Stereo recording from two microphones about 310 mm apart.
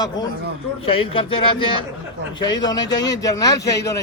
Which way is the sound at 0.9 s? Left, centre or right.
Centre.